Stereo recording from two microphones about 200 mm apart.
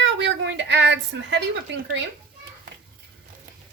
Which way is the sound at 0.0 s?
65° right (ahead or behind).